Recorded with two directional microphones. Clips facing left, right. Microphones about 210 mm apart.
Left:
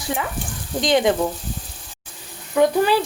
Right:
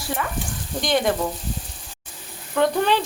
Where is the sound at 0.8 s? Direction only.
20° left (ahead or behind).